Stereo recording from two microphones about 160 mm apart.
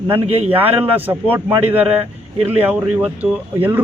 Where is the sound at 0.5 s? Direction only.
10° right (ahead or behind).